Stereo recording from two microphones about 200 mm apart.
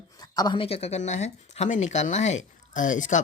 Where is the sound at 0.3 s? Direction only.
20° left (ahead or behind).